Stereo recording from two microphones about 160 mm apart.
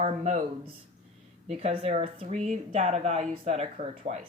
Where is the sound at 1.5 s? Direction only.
40° right (ahead or behind).